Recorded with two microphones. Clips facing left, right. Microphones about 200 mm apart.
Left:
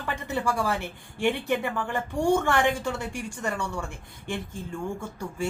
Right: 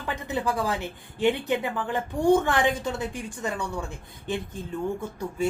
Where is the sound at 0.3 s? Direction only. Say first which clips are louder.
Even; 15° right (ahead or behind).